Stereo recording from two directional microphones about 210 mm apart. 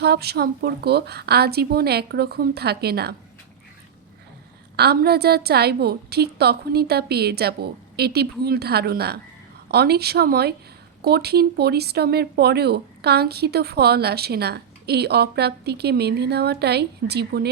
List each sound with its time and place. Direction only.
0.0 s speech: 50° right (ahead or behind)
4.8 s speech: 50° right (ahead or behind)